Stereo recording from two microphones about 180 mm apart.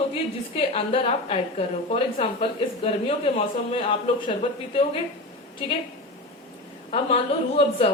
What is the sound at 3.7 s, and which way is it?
Speech, 25° left (ahead or behind).